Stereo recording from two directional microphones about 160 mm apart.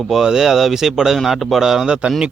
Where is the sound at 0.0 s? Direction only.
Centre (ahead or behind).